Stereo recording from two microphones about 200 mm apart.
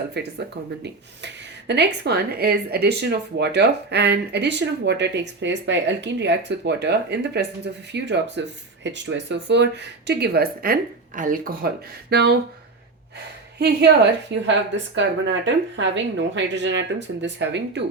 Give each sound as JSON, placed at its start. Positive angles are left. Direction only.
{"t": 0.2, "sound": "speech", "side_deg": -55}
{"t": 13.6, "sound": "speech", "side_deg": -55}